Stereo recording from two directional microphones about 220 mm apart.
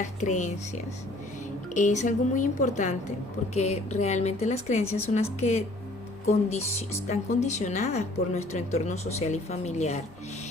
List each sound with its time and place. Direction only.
0.0 s speech: 30° left (ahead or behind)
1.7 s a woman's voice: 35° left (ahead or behind)